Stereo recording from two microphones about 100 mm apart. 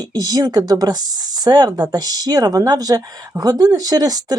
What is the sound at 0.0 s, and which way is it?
Speech, 40° right (ahead or behind).